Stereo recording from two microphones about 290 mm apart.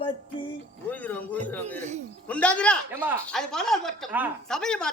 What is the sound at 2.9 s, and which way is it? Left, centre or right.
Speech, centre.